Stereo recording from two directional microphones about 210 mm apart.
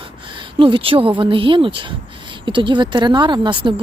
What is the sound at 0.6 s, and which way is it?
Speech, 25° right (ahead or behind).